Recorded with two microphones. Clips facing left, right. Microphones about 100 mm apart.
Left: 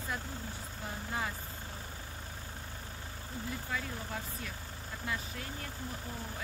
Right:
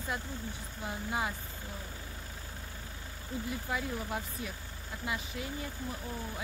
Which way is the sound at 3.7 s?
15° right (ahead or behind).